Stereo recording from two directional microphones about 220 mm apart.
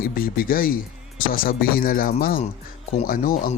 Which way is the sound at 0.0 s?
40° left (ahead or behind).